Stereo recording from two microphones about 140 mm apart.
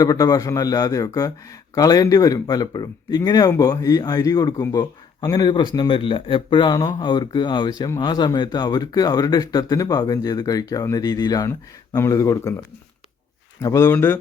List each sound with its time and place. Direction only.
0.0 s speech: 25° left (ahead or behind)
13.6 s speech: 20° left (ahead or behind)